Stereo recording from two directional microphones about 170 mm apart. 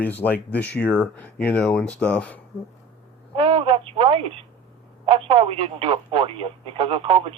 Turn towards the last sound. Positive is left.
turn(degrees=-30)  # may be behind; listen again after turning